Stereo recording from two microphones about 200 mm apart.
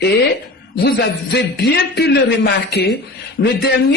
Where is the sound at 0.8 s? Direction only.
60° left (ahead or behind).